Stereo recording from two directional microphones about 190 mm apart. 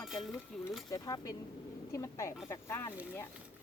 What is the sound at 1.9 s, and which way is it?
Speech, 15° left (ahead or behind).